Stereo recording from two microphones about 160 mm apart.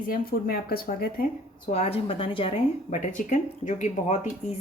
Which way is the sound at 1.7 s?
40° left (ahead or behind).